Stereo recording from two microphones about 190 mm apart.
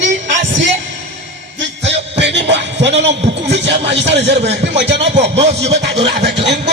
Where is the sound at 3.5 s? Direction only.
65° right (ahead or behind).